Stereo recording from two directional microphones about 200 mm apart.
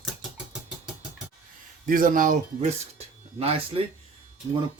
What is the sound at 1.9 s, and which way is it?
Speech, 45° right (ahead or behind).